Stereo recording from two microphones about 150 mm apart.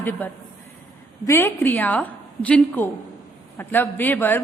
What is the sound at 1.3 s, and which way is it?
A woman's voice, 15° left (ahead or behind).